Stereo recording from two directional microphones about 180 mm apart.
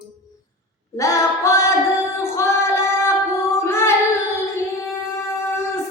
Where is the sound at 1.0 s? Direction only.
15° left (ahead or behind).